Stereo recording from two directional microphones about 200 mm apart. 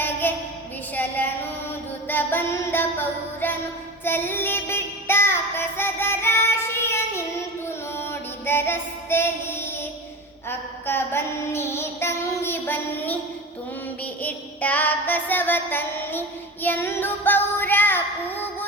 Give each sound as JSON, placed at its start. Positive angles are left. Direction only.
{"t": 0.0, "sound": "a sound", "side_deg": 10}
{"t": 2.0, "sound": "music", "side_deg": 10}
{"t": 4.0, "sound": "child singing", "side_deg": 10}
{"t": 7.9, "sound": "music", "side_deg": 10}
{"t": 10.5, "sound": "child singing", "side_deg": 10}
{"t": 14.0, "sound": "music", "side_deg": 10}